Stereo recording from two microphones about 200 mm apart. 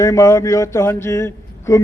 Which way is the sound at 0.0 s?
15° left (ahead or behind).